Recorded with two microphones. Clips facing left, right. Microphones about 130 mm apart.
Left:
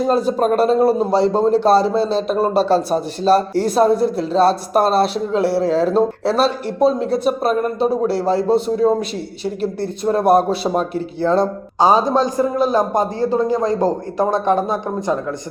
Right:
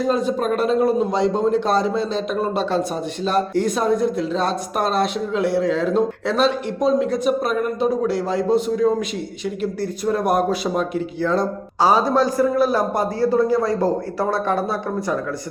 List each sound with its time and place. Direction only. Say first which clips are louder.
0.0 s a man's voice: left 4 dB; 35° left (ahead or behind); by 15.2 s 20° left (ahead or behind)